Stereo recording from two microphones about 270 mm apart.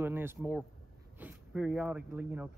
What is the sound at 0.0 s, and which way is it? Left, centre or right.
Speech, centre.